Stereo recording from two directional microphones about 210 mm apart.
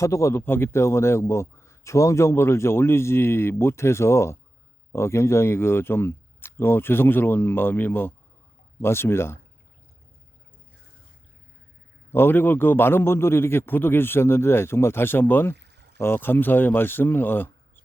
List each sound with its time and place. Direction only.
0.0 s a man's voice: 15° left (ahead or behind)
12.1 s a man's voice: 10° left (ahead or behind)
15.5 s pour: 55° right (ahead or behind)
16.0 s a man's voice: 10° left (ahead or behind)